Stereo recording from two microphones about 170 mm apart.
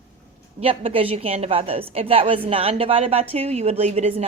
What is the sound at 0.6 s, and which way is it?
A woman's voice, 35° right (ahead or behind).